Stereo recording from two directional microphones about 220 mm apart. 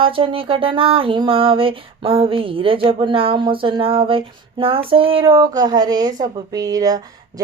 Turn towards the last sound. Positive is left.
turn(degrees=-15)  # may be behind; listen again after turning